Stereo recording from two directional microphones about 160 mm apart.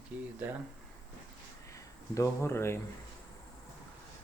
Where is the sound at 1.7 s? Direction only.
20° left (ahead or behind).